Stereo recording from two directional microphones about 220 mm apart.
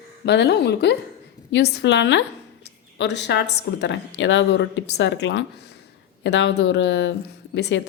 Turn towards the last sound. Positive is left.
turn(degrees=55)  # may be behind; listen again after turning